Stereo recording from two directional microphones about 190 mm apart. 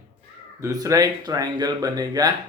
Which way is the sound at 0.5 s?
15° right (ahead or behind).